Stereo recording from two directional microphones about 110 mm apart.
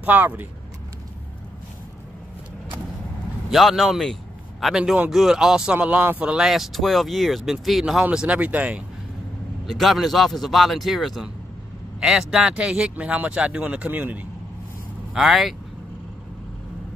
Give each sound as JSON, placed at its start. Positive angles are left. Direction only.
{"t": 0.0, "sound": "speech", "side_deg": -15}
{"t": 3.4, "sound": "a man's voice", "side_deg": 0}
{"t": 9.7, "sound": "speech", "side_deg": 0}
{"t": 15.1, "sound": "speech", "side_deg": 0}